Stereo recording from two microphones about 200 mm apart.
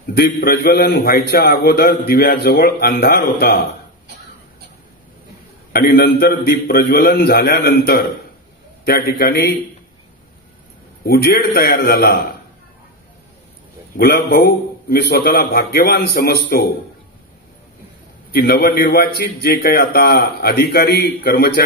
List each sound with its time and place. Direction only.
0.0 s a man's voice: 50° left (ahead or behind)
5.7 s a man's voice: 55° left (ahead or behind)
11.1 s a man's voice: 50° left (ahead or behind)
13.9 s a man's voice: 50° left (ahead or behind)
18.3 s a man's voice: 50° left (ahead or behind)